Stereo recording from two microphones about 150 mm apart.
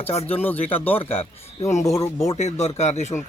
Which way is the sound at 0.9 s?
40° left (ahead or behind).